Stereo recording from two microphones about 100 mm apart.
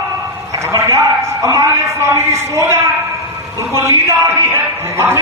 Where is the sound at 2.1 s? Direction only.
25° right (ahead or behind).